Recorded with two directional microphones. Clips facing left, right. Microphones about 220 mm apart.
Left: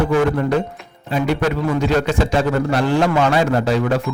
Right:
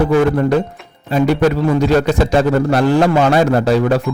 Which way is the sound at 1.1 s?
40° right (ahead or behind).